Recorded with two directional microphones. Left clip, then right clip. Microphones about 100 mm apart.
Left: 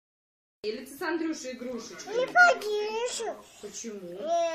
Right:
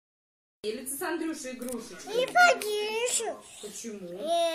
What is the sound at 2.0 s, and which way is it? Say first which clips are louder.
A child's voice: left 1 dB; 10° right (ahead or behind).